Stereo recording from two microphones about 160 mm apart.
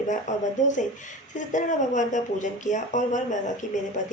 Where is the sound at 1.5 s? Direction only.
50° left (ahead or behind).